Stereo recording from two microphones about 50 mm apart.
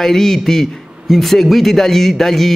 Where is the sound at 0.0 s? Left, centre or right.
Centre.